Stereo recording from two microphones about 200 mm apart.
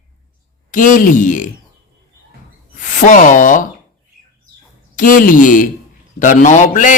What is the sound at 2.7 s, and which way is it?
Speech, 40° left (ahead or behind).